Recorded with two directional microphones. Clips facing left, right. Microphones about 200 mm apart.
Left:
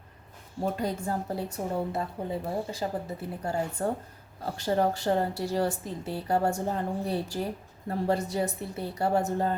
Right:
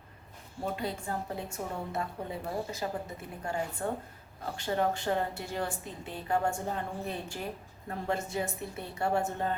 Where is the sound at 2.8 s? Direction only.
30° left (ahead or behind).